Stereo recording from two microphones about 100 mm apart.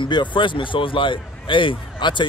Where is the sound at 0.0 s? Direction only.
50° left (ahead or behind).